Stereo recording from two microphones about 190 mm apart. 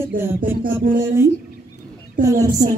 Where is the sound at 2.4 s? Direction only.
20° right (ahead or behind).